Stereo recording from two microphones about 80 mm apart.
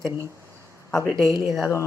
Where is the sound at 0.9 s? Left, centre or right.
Left.